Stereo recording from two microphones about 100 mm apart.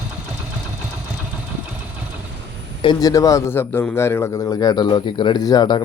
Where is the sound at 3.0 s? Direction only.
35° left (ahead or behind).